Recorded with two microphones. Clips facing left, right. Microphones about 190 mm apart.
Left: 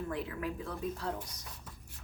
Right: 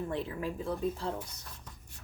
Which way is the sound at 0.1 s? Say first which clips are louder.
Right 2 dB; 30° right (ahead or behind).